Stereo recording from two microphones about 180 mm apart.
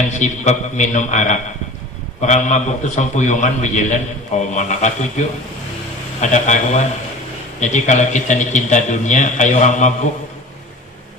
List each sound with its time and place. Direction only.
0.1 s a man's voice: 45° left (ahead or behind)
6.3 s a man's voice: 40° left (ahead or behind)